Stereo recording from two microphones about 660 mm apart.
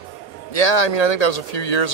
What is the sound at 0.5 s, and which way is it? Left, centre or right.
Speech, left.